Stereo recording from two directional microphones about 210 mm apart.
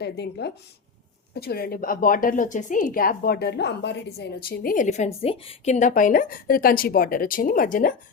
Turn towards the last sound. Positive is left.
turn(degrees=40)  # may be behind; listen again after turning